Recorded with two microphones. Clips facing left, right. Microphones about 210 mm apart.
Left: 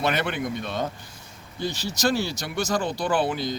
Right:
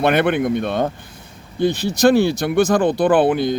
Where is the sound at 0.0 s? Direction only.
55° right (ahead or behind).